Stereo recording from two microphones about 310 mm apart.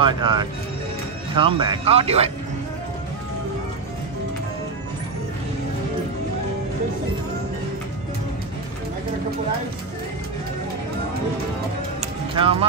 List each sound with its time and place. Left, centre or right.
0.0 s speech: centre
12.4 s speech: centre